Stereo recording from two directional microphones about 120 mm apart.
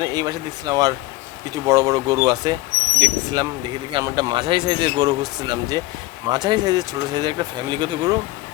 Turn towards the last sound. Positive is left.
turn(degrees=-40)  # may be behind; listen again after turning